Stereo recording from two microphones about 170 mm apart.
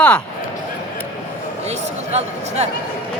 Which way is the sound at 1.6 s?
40° right (ahead or behind).